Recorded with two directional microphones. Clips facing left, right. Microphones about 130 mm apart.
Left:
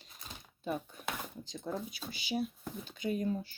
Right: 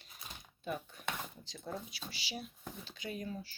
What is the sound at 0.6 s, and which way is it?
Speech, 40° left (ahead or behind).